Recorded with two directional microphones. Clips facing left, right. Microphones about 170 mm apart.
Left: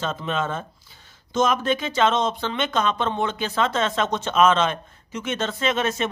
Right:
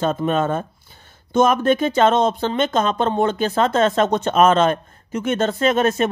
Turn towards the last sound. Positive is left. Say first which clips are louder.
# right 6 dB
turn(degrees=-50)  # may be behind; listen again after turning